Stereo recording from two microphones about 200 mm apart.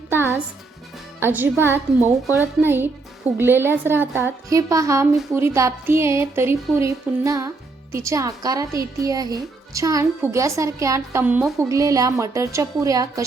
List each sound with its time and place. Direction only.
0.1 s music: 10° right (ahead or behind)
1.2 s speech: 10° right (ahead or behind)